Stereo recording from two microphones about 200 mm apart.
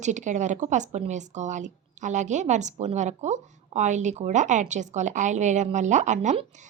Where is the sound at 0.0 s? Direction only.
35° right (ahead or behind).